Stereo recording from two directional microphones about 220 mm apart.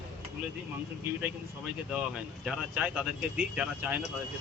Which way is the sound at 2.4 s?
5° right (ahead or behind).